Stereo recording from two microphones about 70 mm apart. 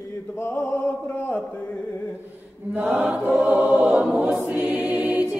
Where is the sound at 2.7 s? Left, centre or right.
Right.